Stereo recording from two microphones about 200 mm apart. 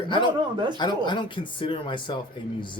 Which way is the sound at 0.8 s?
20° left (ahead or behind).